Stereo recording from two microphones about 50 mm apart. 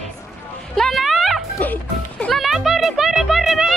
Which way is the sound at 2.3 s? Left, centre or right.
Centre.